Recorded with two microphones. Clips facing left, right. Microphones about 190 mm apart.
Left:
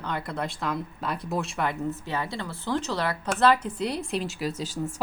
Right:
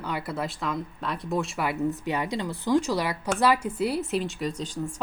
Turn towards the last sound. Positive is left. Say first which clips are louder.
# left 1 dB
turn(degrees=5)  # may be behind; listen again after turning